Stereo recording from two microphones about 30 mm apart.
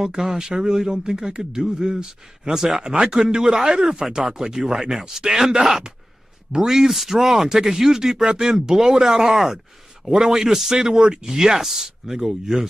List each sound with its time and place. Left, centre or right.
0.1 s speech: centre
6.9 s speech: centre